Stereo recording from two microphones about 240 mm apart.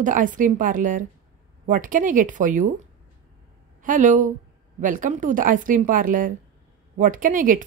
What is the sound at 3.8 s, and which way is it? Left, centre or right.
Speech, right.